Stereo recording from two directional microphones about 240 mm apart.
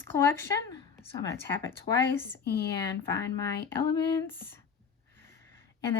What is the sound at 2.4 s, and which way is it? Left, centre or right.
Speech, left.